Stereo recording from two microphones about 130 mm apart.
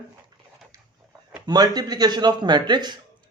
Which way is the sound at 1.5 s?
30° right (ahead or behind).